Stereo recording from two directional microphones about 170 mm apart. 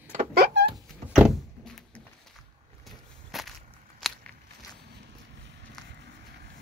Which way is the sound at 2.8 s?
Centre (ahead or behind).